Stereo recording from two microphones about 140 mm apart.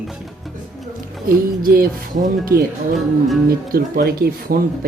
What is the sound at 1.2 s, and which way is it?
Speech, 90° right.